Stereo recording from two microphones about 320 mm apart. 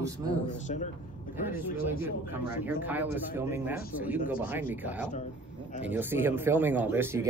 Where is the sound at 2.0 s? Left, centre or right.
Centre.